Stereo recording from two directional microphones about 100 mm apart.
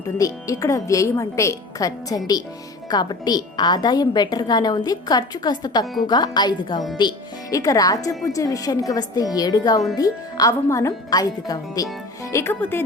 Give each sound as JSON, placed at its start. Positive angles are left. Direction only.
{"t": 0.2, "sound": "a woman's voice", "side_deg": 35}
{"t": 7.5, "sound": "a woman's voice", "side_deg": 35}
{"t": 12.3, "sound": "speech", "side_deg": 25}